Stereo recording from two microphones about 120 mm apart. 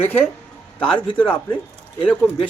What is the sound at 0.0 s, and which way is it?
Speech, 15° left (ahead or behind).